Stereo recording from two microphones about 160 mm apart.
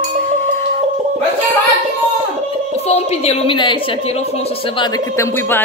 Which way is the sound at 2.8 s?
40° left (ahead or behind).